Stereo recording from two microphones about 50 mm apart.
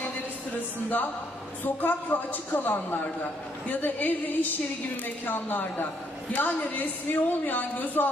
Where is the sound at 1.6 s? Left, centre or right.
Left.